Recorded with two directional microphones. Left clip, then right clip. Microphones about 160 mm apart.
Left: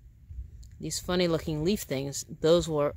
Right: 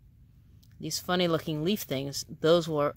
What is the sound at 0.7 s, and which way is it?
Speech, 5° left (ahead or behind).